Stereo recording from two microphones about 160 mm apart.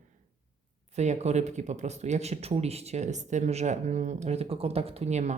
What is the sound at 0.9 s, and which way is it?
Speech, 45° right (ahead or behind).